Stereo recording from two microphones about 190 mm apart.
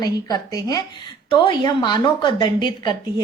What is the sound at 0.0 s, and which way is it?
A woman's voice, 20° left (ahead or behind).